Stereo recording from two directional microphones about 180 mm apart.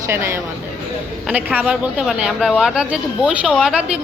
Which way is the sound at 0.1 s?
15° right (ahead or behind).